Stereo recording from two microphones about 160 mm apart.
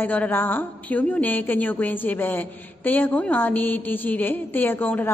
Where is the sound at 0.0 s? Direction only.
10° left (ahead or behind).